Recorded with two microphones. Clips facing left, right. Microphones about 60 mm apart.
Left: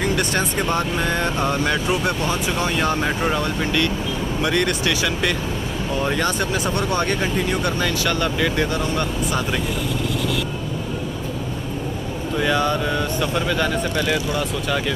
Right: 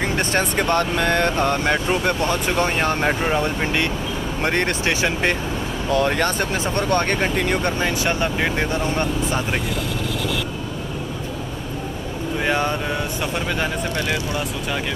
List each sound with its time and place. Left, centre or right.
0.0 s vehicle: right
0.4 s speech: right
1.6 s speech: right
3.3 s speech: right
4.4 s speech: right
6.0 s speech: right
7.6 s speech: right
12.4 s speech: right
13.9 s speech: centre